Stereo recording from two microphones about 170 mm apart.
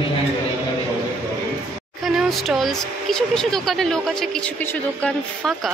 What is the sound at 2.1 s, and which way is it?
Speech, centre (ahead or behind).